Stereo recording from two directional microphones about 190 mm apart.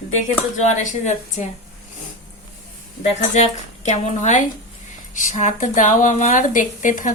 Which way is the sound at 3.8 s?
35° left (ahead or behind).